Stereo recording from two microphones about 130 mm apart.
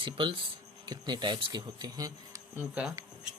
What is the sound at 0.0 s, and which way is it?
Speech, 40° right (ahead or behind).